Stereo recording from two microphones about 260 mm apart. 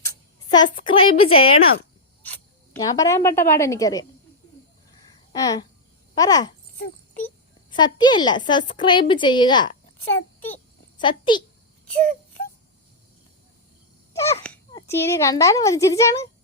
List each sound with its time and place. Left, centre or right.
0.5 s a woman's voice: centre
2.7 s speech: centre
5.3 s speech: centre
7.7 s speech: centre
11.0 s speech: centre
14.1 s a sound: centre
14.7 s speech: centre